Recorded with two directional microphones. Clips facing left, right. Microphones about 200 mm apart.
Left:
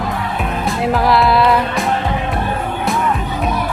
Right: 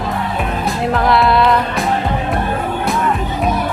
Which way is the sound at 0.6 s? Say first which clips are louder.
Left 1 dB; centre (ahead or behind).